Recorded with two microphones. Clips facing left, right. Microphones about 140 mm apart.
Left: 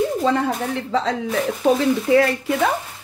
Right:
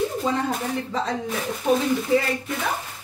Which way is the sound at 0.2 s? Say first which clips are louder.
Left 6 dB; 75° left (ahead or behind).